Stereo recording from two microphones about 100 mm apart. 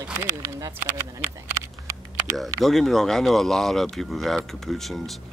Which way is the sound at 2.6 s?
Centre (ahead or behind).